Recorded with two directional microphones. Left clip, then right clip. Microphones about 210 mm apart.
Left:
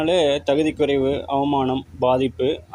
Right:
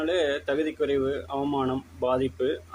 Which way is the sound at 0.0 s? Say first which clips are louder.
Left 7 dB; 25° left (ahead or behind).